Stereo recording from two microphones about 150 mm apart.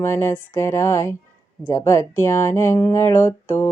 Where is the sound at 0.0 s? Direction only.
15° left (ahead or behind).